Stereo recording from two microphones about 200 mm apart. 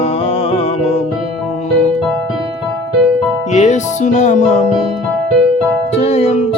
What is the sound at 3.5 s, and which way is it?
Music, 35° left (ahead or behind).